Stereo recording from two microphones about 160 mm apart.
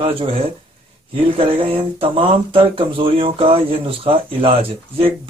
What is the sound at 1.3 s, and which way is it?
Speech, 35° right (ahead or behind).